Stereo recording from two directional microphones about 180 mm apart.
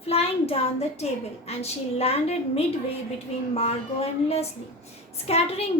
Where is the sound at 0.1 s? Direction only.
35° left (ahead or behind).